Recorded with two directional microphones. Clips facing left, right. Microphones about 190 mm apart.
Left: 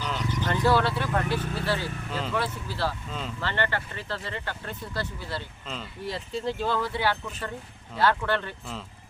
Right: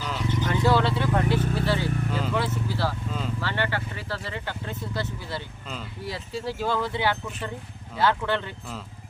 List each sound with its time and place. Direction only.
0.0 s vehicle: 5° right (ahead or behind)
3.1 s vehicle: 5° right (ahead or behind)
5.6 s speech: 10° right (ahead or behind)